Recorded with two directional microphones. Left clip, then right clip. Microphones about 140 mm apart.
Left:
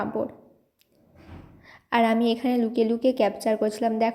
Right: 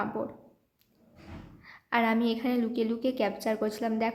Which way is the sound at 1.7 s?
30° left (ahead or behind).